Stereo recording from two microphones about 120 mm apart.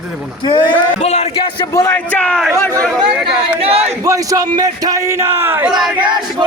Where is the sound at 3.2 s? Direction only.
55° right (ahead or behind).